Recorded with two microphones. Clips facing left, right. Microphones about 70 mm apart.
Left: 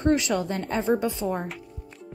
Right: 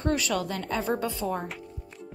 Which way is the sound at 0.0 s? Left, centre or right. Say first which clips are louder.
Left 4 dB; left.